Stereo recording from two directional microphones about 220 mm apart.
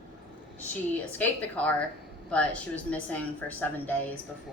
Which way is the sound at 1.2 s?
5° left (ahead or behind).